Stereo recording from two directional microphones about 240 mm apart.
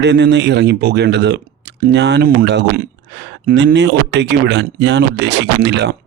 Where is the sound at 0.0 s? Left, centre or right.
Right.